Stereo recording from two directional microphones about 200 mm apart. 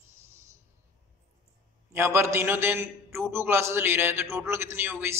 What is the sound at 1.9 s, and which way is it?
A man's voice, 10° right (ahead or behind).